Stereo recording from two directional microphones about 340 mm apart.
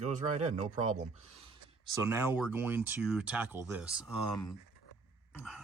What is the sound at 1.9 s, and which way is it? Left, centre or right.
Speech, centre.